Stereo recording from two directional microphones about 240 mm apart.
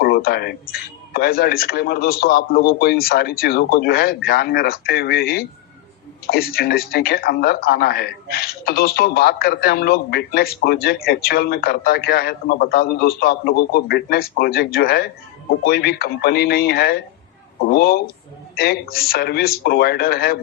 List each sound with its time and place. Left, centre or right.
0.0 s a man's voice: left